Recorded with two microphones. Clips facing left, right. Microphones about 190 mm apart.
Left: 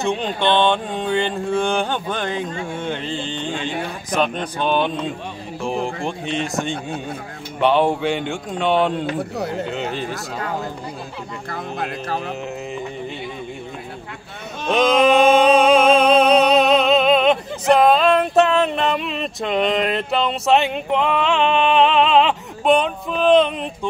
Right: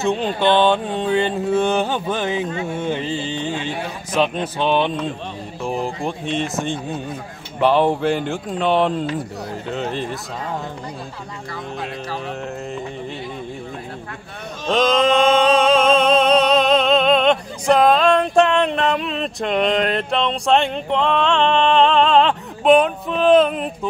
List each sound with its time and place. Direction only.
0.0 s mantra: 5° right (ahead or behind)
4.7 s mantra: 5° right (ahead or behind)
6.0 s mantra: centre (ahead or behind)
9.0 s speech: 70° left (ahead or behind)
9.7 s mantra: centre (ahead or behind)
11.5 s speech: 50° left (ahead or behind)
14.7 s music: 10° left (ahead or behind)